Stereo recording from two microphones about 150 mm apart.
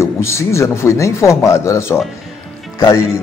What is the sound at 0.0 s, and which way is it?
A man's voice, 20° left (ahead or behind).